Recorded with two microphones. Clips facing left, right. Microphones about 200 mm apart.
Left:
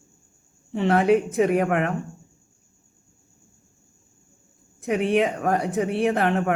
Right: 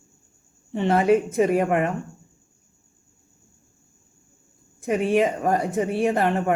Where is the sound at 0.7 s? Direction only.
Centre (ahead or behind).